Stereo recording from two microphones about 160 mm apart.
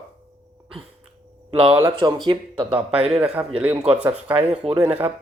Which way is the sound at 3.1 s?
5° right (ahead or behind).